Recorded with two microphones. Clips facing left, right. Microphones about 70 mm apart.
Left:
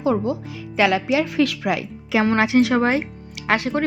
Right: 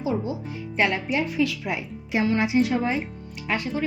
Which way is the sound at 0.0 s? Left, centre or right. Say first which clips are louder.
Left 6 dB; left.